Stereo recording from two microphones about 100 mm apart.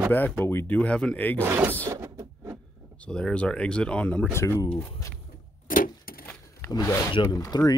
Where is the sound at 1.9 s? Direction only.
25° right (ahead or behind).